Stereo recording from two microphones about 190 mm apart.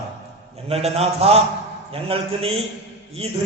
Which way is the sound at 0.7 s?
30° right (ahead or behind).